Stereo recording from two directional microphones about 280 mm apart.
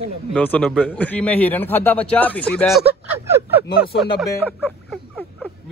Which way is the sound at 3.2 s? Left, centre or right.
Centre.